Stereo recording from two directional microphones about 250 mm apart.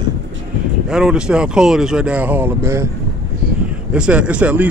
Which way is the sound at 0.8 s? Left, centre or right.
Centre.